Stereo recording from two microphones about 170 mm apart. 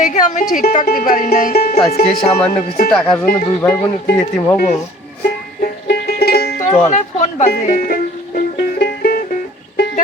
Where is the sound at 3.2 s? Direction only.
10° left (ahead or behind).